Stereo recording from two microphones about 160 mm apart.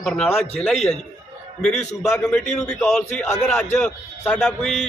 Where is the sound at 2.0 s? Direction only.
5° left (ahead or behind).